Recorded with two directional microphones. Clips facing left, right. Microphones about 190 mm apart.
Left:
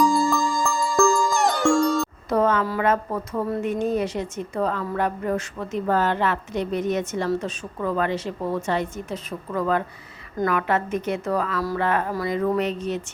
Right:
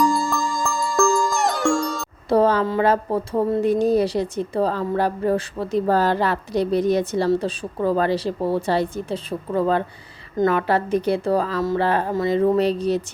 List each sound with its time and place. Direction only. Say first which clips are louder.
0.0 s music: left 1 dB; centre (ahead or behind)
2.3 s speech: right 4 dB; 30° right (ahead or behind)